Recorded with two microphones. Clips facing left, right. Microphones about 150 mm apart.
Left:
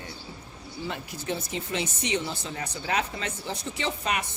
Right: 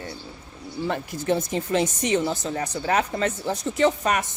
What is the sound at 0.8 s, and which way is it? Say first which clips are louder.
Speech: right 8 dB; 50° right (ahead or behind).